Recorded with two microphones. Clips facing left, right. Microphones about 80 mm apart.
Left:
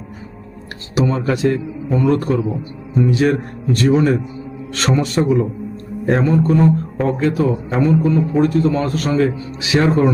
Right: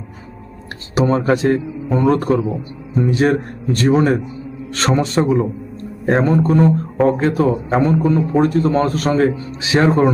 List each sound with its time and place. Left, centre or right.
0.9 s speech: right
6.1 s speech: right